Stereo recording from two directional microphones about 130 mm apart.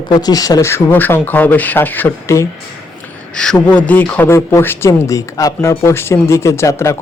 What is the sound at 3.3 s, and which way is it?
Speech, 5° left (ahead or behind).